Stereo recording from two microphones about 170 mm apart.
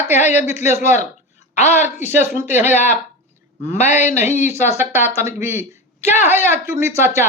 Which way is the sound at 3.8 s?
40° left (ahead or behind).